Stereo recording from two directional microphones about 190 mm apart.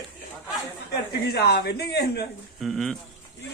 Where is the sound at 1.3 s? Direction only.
55° left (ahead or behind).